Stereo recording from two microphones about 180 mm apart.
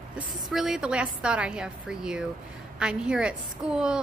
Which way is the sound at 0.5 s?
Centre (ahead or behind).